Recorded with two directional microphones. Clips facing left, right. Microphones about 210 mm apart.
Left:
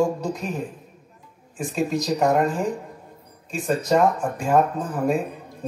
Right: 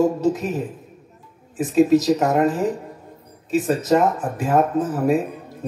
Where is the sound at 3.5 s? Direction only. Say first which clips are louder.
Right 4 dB; 5° right (ahead or behind).